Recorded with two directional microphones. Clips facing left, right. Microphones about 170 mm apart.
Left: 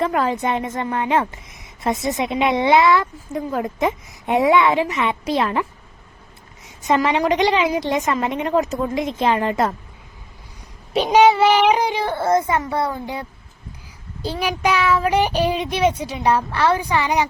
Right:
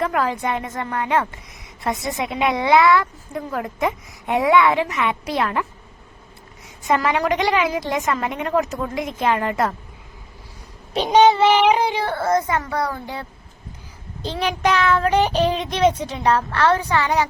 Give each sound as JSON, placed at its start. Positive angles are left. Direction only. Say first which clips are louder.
{"t": 0.0, "sound": "a woman's voice", "louder": "left 2 dB", "side_deg": 25}
{"t": 6.8, "sound": "a woman's voice", "louder": "left 2 dB", "side_deg": 25}
{"t": 10.9, "sound": "a woman's voice", "louder": "left 1 dB", "side_deg": 10}